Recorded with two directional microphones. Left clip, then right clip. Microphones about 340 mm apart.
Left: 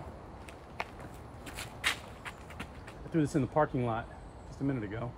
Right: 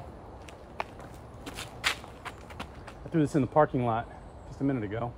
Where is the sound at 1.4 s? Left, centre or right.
Centre.